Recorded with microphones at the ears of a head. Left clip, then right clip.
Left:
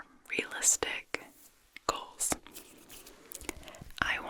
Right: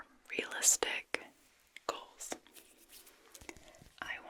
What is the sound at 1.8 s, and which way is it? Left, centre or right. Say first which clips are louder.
Whispering: left 7 dB; left.